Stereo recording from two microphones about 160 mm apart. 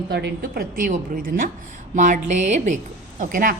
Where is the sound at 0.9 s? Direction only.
60° right (ahead or behind).